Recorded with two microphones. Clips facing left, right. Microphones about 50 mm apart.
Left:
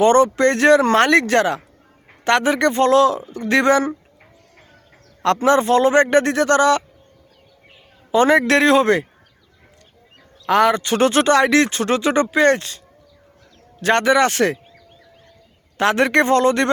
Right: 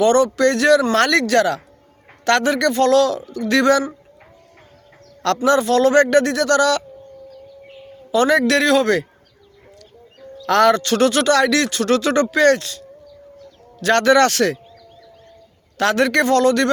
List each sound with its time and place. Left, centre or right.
0.0 s speech: left
5.5 s speech: left
8.1 s speech: left
10.3 s speech: centre
15.8 s speech: left